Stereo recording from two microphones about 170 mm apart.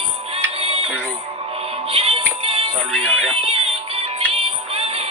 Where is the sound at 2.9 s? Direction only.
5° left (ahead or behind).